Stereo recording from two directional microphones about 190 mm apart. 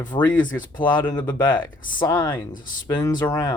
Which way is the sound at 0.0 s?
20° left (ahead or behind).